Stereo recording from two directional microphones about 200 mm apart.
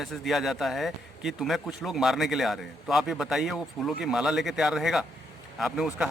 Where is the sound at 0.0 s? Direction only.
Centre (ahead or behind).